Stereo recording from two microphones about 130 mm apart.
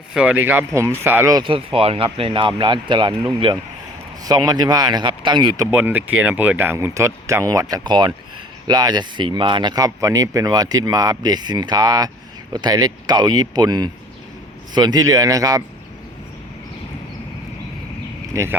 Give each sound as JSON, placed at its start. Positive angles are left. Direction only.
{"t": 0.1, "sound": "speech", "side_deg": -10}
{"t": 1.4, "sound": "speech", "side_deg": -45}
{"t": 5.7, "sound": "speech", "side_deg": -15}